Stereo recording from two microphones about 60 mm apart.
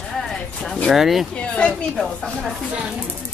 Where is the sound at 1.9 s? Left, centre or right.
Centre.